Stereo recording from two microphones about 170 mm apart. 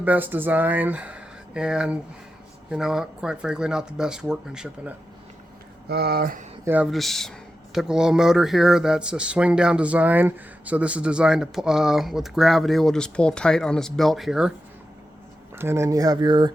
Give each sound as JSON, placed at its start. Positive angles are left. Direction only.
{"t": 0.0, "sound": "speech", "side_deg": -10}
{"t": 5.9, "sound": "speech", "side_deg": -70}
{"t": 6.9, "sound": "speech", "side_deg": 0}
{"t": 15.5, "sound": "speech", "side_deg": -15}